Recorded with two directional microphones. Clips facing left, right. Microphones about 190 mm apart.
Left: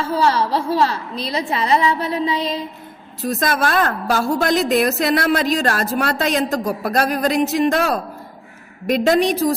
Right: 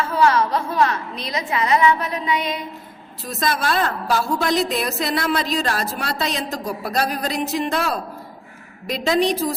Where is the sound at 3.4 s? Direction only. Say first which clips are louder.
Left 2 dB; 50° left (ahead or behind).